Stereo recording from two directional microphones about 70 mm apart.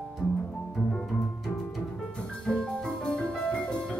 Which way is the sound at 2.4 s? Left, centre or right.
Centre.